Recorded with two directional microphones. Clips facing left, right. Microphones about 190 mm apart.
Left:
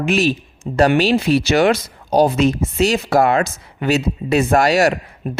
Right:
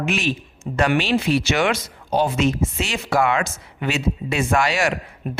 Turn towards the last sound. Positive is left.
turn(degrees=40)  # may be behind; listen again after turning